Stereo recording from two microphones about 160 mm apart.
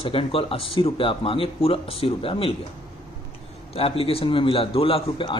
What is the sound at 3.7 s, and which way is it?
A man's voice, 35° left (ahead or behind).